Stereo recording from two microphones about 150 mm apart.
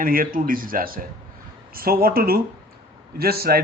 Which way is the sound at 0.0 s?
70° right (ahead or behind).